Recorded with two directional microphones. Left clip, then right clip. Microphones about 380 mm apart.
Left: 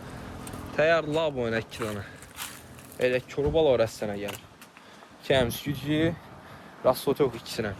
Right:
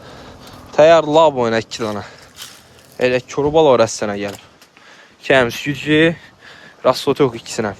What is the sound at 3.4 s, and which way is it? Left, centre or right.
Speech, right.